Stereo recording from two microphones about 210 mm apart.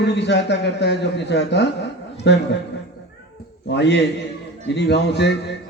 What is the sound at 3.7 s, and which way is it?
A man's voice, 55° left (ahead or behind).